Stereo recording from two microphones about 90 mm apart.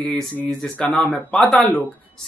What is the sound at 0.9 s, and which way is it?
Speech, 15° left (ahead or behind).